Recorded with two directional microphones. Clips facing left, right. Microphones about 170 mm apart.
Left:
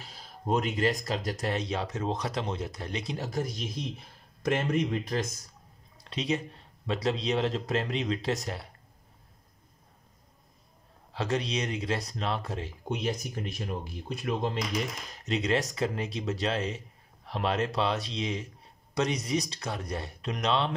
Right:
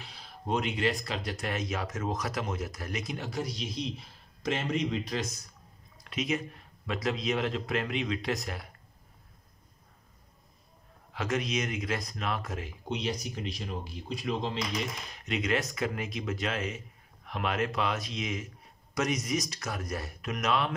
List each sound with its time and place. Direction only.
0.0 s speech: 45° left (ahead or behind)
3.3 s speech: 50° left (ahead or behind)
6.0 s speech: 30° left (ahead or behind)
11.1 s speech: 35° left (ahead or behind)
12.8 s speech: 50° left (ahead or behind)
15.1 s speech: 35° left (ahead or behind)